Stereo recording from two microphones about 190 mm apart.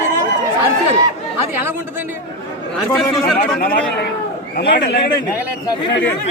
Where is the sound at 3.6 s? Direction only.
50° left (ahead or behind).